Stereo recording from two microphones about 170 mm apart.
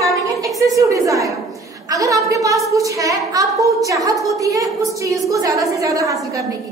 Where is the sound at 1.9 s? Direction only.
20° right (ahead or behind).